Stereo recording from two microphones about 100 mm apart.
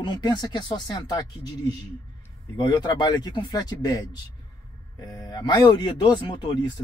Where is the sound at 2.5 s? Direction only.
40° left (ahead or behind).